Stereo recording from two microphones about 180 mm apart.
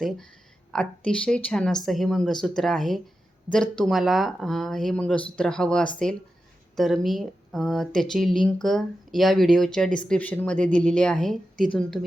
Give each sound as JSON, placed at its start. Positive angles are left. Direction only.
{"t": 0.7, "sound": "speech", "side_deg": 5}